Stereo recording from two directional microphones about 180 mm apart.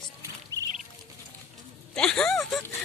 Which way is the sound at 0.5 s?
20° right (ahead or behind).